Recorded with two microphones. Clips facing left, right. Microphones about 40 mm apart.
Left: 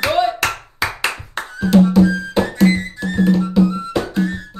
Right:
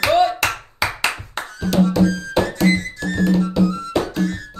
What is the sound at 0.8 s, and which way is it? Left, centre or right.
Music, centre.